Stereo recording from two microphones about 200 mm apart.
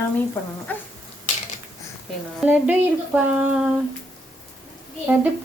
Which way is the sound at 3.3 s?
5° right (ahead or behind).